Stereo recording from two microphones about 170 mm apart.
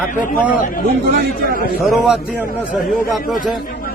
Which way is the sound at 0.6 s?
55° left (ahead or behind).